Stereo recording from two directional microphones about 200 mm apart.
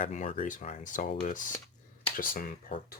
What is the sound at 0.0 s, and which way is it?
Speech, 35° left (ahead or behind).